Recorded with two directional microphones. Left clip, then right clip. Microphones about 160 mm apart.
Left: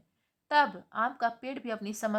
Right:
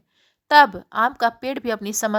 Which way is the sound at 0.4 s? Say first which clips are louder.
Right 12 dB; 40° right (ahead or behind).